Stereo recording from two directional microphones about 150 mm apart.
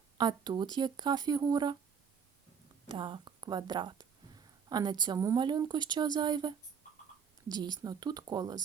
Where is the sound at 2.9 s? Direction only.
35° right (ahead or behind).